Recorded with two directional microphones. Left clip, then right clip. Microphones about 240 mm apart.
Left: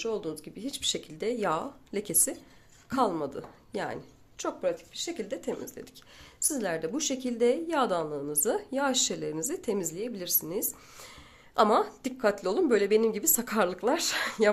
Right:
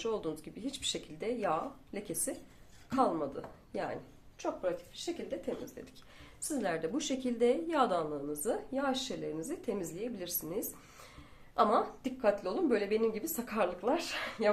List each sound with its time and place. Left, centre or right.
0.0 s a woman's voice: centre
6.4 s a woman's voice: left